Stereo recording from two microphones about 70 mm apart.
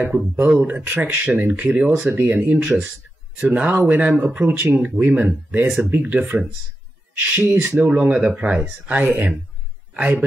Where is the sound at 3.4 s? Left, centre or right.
Right.